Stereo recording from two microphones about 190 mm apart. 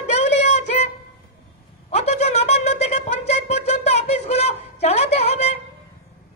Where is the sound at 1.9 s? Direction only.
35° left (ahead or behind).